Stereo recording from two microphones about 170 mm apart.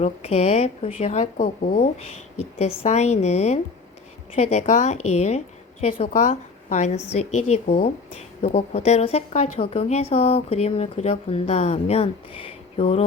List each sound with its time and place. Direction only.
0.0 s a woman's voice: 40° left (ahead or behind)
1.4 s speech: 55° left (ahead or behind)
1.8 s a woman's voice: 35° left (ahead or behind)